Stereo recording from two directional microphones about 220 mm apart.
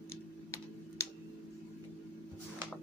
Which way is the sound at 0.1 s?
10° left (ahead or behind).